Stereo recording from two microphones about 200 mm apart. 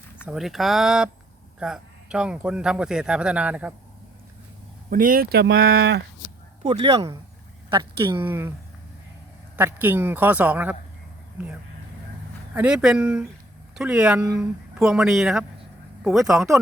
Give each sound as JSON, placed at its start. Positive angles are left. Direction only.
{"t": 0.3, "sound": "speech", "side_deg": 0}
{"t": 4.9, "sound": "speech", "side_deg": -45}
{"t": 5.5, "sound": "speech", "side_deg": -90}
{"t": 6.6, "sound": "speech", "side_deg": -25}
{"t": 8.2, "sound": "speech", "side_deg": -10}
{"t": 9.6, "sound": "speech", "side_deg": -10}
{"t": 12.5, "sound": "speech", "side_deg": -5}